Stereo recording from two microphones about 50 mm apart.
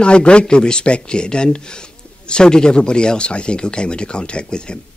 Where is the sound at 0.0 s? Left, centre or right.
Left.